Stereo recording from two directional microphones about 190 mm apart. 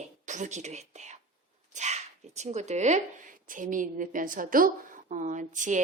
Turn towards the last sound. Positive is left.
turn(degrees=-40)  # may be behind; listen again after turning